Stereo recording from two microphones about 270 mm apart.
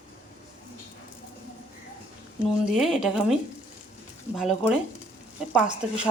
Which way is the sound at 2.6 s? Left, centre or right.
Centre.